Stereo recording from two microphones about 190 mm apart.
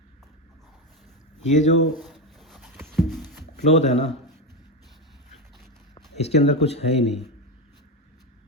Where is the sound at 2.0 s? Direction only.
Centre (ahead or behind).